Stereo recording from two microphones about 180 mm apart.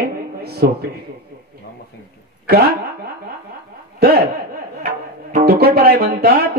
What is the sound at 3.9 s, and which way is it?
Speech, 60° right (ahead or behind).